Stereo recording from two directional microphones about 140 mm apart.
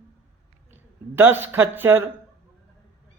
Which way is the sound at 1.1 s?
15° right (ahead or behind).